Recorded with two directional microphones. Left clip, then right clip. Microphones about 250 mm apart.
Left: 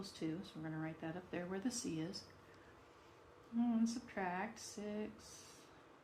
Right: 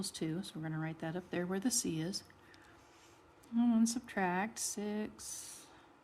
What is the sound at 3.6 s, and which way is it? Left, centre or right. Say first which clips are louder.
Speech: right 6 dB; right.